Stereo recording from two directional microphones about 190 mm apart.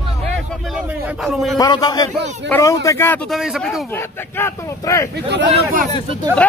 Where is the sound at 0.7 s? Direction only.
Centre (ahead or behind).